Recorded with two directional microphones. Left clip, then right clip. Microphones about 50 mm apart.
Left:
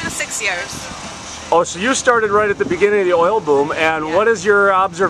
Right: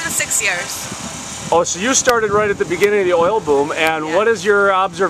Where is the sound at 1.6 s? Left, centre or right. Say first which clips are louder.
Even; centre.